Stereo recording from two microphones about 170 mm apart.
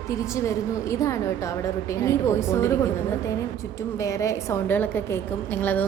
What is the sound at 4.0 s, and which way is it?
A woman's voice, 20° left (ahead or behind).